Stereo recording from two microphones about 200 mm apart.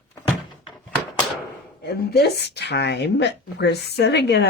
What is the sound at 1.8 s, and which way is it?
Speech, 55° left (ahead or behind).